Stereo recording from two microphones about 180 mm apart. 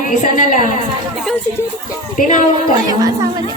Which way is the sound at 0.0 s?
45° left (ahead or behind).